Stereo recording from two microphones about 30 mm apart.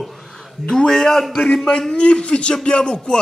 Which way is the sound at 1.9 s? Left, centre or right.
Left.